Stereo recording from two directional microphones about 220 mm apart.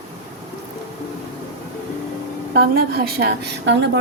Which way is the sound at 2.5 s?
45° right (ahead or behind).